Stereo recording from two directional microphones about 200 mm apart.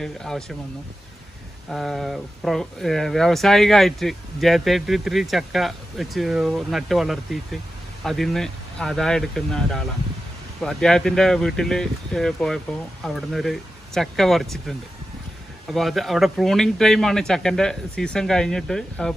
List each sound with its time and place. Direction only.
0.0 s speech: centre (ahead or behind)
1.7 s speech: centre (ahead or behind)